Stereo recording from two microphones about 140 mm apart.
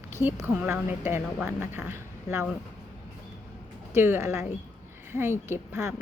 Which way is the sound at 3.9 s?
15° right (ahead or behind).